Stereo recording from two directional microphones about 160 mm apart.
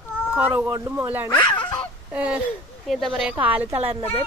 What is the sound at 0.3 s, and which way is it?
Speech, 10° right (ahead or behind).